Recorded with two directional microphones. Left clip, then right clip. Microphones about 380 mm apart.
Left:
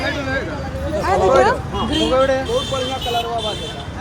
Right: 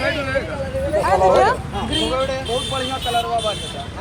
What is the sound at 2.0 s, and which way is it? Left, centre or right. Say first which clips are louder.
Speech: left 5 dB; left.